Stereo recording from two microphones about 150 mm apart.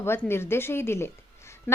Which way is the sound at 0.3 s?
15° left (ahead or behind).